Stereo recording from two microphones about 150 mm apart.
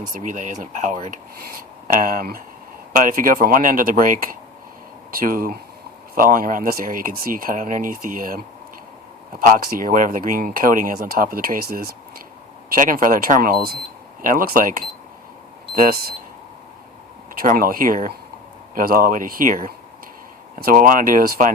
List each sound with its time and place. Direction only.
0.1 s speech: 60° right (ahead or behind)
15.7 s speech: 70° right (ahead or behind)
17.4 s speech: 70° right (ahead or behind)